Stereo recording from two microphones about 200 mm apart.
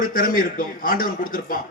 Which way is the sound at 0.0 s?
45° left (ahead or behind).